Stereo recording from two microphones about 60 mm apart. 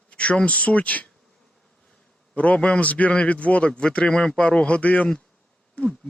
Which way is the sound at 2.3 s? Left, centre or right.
Left.